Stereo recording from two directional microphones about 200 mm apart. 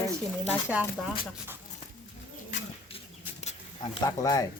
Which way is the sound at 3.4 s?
35° left (ahead or behind).